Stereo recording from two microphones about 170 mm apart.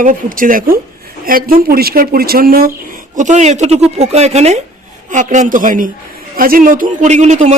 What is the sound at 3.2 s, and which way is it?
Speech, 45° right (ahead or behind).